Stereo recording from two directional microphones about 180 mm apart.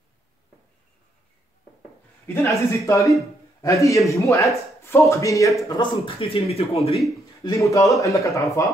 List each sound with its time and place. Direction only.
2.2 s speech: 15° left (ahead or behind)
5.8 s speech: 30° left (ahead or behind)
7.4 s speech: 15° left (ahead or behind)